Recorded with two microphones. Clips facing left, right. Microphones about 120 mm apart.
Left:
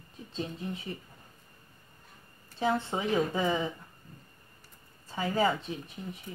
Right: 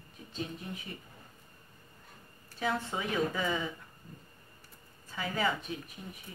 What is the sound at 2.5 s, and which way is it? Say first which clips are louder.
Speech: left 4 dB; 30° left (ahead or behind).